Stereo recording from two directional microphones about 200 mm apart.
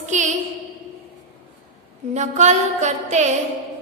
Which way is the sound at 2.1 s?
35° right (ahead or behind).